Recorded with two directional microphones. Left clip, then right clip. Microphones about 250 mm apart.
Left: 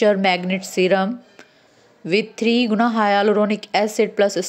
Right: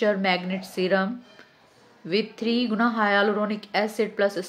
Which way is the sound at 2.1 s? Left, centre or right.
Left.